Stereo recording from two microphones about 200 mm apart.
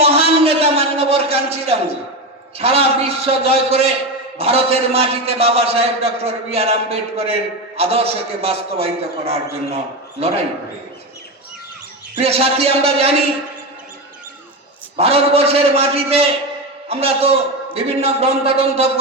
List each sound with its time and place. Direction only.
0.0 s a sound: 30° right (ahead or behind)
2.6 s a man's voice: 30° right (ahead or behind)
12.2 s a man's voice: 30° right (ahead or behind)
14.9 s a man's voice: 30° right (ahead or behind)